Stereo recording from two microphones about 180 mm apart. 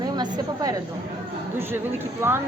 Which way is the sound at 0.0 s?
20° right (ahead or behind).